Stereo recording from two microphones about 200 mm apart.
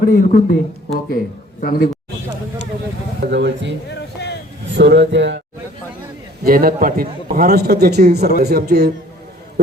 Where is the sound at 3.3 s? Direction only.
65° right (ahead or behind).